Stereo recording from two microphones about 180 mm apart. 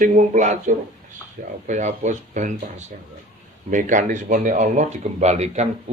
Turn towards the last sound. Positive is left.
turn(degrees=-35)  # may be behind; listen again after turning